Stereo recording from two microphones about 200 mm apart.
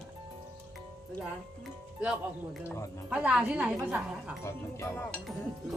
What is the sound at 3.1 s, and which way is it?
A woman's voice, 5° right (ahead or behind).